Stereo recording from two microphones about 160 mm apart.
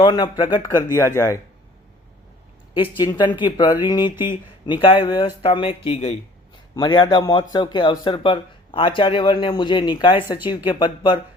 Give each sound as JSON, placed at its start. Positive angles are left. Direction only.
{"t": 0.0, "sound": "speech", "side_deg": 30}
{"t": 2.7, "sound": "speech", "side_deg": 30}